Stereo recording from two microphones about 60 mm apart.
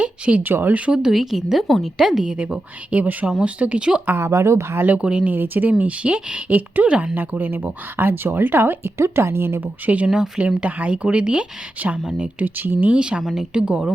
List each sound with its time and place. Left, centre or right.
0.0 s a sound: right
0.4 s speech: right
0.9 s a woman's voice: centre
4.2 s speech: right
4.9 s speech: centre
5.3 s speech: right
5.8 s speech: centre
10.1 s a woman's voice: centre
10.5 s a woman's voice: right
12.5 s speech: right
12.9 s a woman's voice: centre